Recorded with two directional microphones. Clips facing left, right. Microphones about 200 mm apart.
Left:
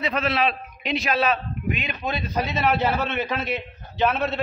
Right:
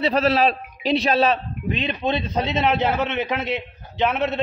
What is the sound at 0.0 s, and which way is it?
A man's voice, 35° right (ahead or behind).